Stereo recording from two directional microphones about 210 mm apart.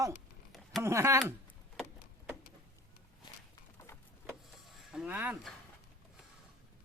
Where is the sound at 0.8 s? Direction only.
15° right (ahead or behind).